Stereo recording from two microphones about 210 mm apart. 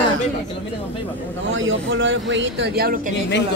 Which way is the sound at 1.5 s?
65° right (ahead or behind).